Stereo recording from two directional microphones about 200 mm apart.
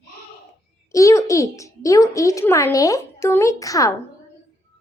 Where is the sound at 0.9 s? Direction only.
15° left (ahead or behind).